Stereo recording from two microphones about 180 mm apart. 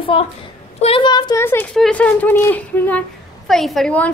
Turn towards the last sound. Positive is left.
turn(degrees=5)  # may be behind; listen again after turning